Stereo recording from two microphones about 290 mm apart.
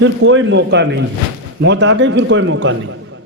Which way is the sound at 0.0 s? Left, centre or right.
Right.